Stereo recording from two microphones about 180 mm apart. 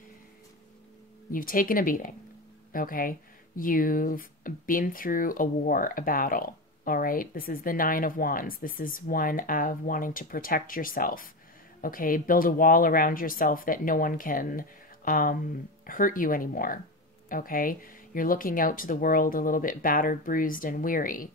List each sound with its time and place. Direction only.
1.3 s speech: 50° left (ahead or behind)